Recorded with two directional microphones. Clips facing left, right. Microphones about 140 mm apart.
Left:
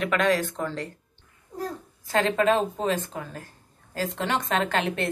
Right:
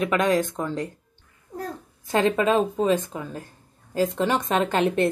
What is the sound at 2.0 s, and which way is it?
A woman's voice, 20° right (ahead or behind).